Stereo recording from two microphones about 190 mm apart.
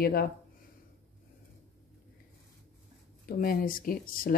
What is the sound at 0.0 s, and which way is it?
Speech, 55° left (ahead or behind).